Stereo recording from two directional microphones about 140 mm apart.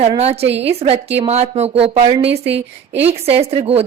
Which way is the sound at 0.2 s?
50° right (ahead or behind).